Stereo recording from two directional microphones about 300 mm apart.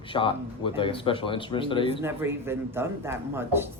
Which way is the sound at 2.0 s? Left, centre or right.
Centre.